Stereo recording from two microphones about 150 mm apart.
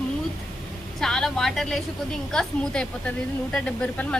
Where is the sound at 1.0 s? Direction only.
5° left (ahead or behind).